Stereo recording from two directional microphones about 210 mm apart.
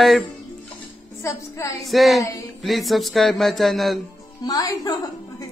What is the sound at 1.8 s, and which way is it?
Speech, centre (ahead or behind).